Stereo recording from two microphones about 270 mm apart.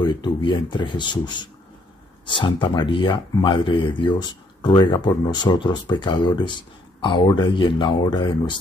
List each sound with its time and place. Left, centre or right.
0.0 s speech: centre